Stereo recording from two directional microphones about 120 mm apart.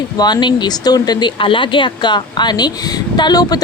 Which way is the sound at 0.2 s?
35° left (ahead or behind).